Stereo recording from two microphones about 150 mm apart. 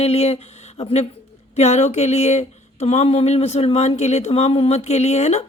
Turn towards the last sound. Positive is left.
turn(degrees=45)  # may be behind; listen again after turning